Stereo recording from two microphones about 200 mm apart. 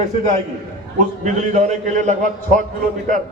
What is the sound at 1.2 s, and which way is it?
A man's voice, 40° right (ahead or behind).